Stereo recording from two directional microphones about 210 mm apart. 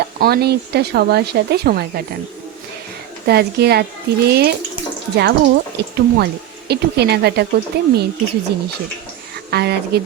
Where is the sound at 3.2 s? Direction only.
50° right (ahead or behind).